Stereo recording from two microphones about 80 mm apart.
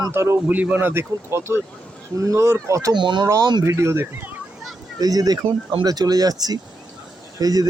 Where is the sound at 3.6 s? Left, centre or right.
Right.